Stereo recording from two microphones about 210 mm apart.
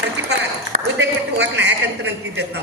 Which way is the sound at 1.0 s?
55° right (ahead or behind).